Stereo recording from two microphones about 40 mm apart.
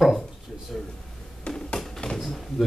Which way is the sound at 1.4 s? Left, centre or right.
Left.